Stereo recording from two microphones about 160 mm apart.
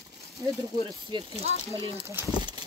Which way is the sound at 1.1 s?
30° right (ahead or behind).